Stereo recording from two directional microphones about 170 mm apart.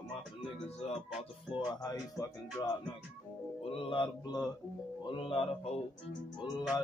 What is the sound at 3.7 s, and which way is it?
Speech, 30° left (ahead or behind).